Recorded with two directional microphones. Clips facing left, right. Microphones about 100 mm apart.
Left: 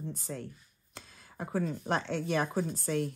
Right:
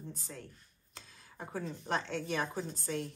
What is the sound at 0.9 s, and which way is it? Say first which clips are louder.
Speech: left 5 dB; 55° left (ahead or behind).